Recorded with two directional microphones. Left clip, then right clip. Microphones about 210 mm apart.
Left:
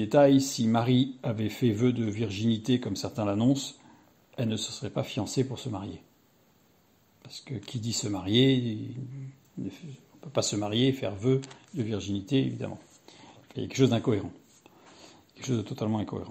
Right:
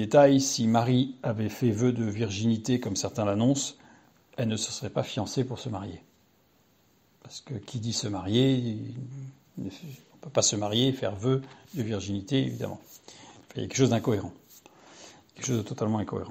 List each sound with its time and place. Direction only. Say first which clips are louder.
0.0 s speech: right 2 dB; 20° right (ahead or behind)
7.2 s speech: left 1 dB; 20° right (ahead or behind)